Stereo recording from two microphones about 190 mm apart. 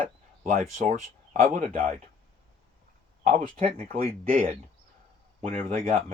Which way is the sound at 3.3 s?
45° right (ahead or behind).